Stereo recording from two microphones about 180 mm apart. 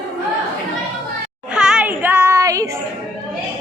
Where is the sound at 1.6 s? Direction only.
5° right (ahead or behind).